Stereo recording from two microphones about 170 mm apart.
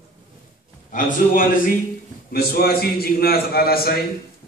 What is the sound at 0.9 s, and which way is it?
A man's voice, 55° left (ahead or behind).